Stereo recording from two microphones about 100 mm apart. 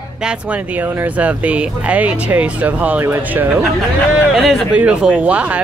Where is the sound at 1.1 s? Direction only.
15° right (ahead or behind).